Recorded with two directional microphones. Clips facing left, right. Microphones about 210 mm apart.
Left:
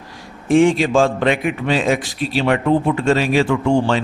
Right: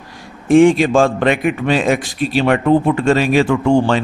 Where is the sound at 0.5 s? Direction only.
55° right (ahead or behind).